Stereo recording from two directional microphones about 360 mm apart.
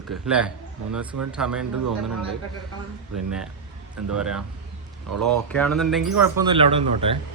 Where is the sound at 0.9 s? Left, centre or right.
Right.